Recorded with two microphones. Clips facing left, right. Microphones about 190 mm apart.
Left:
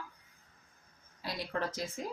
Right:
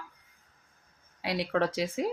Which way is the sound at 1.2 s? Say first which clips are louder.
Right 8 dB; 75° right (ahead or behind).